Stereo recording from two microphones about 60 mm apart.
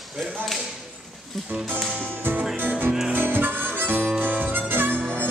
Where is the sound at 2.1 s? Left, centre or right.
Right.